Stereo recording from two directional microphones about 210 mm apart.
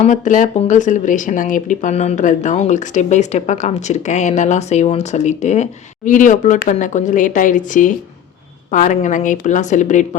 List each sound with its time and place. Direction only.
0.0 s speech: 35° left (ahead or behind)